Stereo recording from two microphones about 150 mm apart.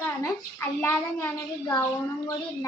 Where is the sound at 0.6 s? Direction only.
15° left (ahead or behind).